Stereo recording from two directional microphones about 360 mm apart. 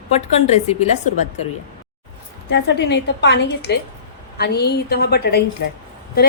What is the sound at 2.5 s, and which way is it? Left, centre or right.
A woman's voice, left.